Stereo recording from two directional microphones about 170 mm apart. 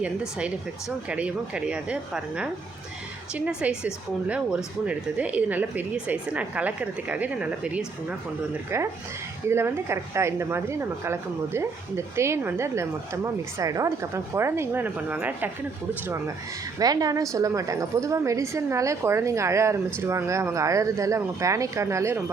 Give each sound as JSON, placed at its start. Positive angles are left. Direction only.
{"t": 0.0, "sound": "a woman's voice", "side_deg": -5}
{"t": 9.5, "sound": "a woman's voice", "side_deg": -15}
{"t": 16.8, "sound": "a woman's voice", "side_deg": -20}